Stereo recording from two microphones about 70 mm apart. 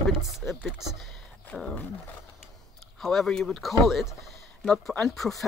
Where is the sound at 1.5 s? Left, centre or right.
Centre.